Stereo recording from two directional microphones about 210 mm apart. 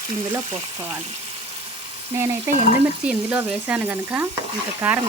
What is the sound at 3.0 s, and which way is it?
Speech, 10° right (ahead or behind).